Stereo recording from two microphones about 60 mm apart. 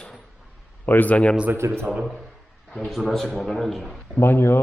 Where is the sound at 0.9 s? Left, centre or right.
Left.